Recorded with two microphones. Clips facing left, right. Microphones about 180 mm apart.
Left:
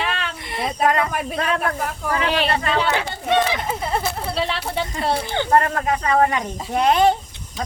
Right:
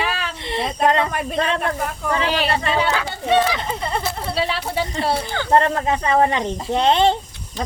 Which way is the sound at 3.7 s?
5° left (ahead or behind).